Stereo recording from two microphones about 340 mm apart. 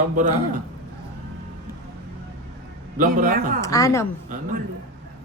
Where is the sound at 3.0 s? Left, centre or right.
Right.